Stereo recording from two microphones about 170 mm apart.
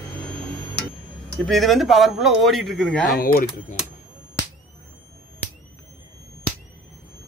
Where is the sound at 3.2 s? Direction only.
55° left (ahead or behind).